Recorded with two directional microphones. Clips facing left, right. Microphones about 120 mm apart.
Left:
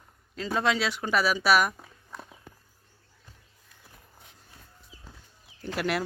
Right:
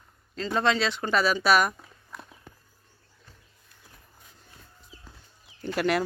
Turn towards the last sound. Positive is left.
turn(degrees=5)  # may be behind; listen again after turning